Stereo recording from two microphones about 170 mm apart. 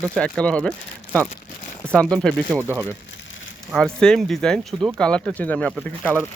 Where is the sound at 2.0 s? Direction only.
5° left (ahead or behind).